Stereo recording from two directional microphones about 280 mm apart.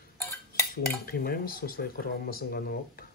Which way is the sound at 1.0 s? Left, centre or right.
Left.